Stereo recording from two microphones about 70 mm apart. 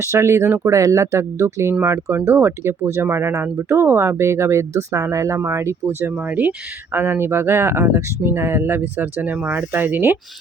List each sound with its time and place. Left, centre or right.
0.0 s speech: right
0.8 s speech: right
6.1 s speech: right
6.9 s speech: right